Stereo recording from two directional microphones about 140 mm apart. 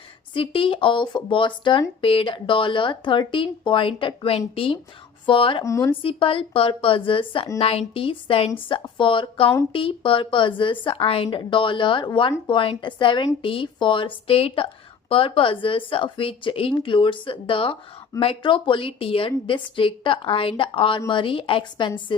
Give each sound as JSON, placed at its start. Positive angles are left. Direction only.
{"t": 0.3, "sound": "a woman's voice", "side_deg": 40}
{"t": 5.6, "sound": "speech", "side_deg": 20}
{"t": 6.0, "sound": "a woman's voice", "side_deg": 40}